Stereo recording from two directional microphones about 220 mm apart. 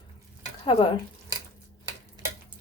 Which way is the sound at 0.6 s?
20° left (ahead or behind).